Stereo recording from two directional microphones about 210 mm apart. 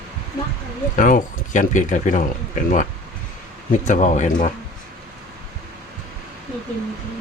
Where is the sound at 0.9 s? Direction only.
40° left (ahead or behind).